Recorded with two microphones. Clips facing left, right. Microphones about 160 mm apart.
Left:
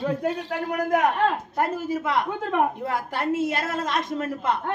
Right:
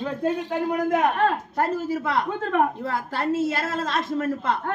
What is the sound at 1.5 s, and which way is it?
A woman's voice, 15° left (ahead or behind).